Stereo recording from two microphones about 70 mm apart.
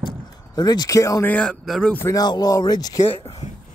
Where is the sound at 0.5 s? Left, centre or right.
Left.